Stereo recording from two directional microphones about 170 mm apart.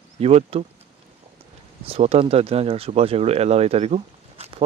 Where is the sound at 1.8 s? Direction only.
35° right (ahead or behind).